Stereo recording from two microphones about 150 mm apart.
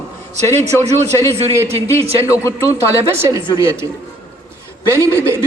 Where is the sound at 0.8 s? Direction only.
45° right (ahead or behind).